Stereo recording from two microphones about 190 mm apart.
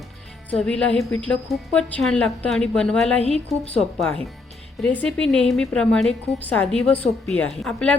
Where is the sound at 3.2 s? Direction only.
35° left (ahead or behind).